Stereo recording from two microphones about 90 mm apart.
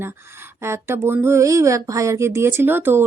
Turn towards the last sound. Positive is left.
turn(degrees=-25)  # may be behind; listen again after turning